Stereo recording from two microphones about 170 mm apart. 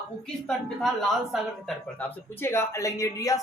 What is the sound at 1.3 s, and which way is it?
Speech, 5° left (ahead or behind).